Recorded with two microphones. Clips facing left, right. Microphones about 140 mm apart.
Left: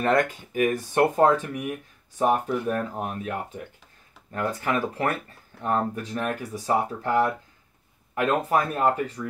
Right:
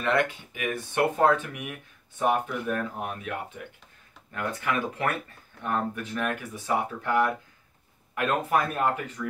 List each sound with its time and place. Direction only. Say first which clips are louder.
0.0 s speech: left 3 dB; 40° left (ahead or behind)